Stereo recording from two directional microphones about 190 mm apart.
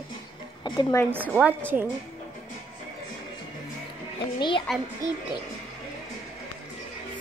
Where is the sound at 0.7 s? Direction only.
25° left (ahead or behind).